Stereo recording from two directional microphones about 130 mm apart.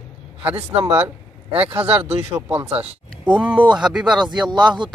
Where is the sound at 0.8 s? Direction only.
50° right (ahead or behind).